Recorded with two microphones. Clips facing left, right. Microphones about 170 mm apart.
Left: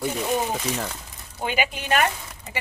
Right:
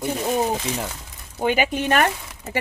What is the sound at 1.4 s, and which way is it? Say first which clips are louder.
Speech: right 5 dB; 45° right (ahead or behind).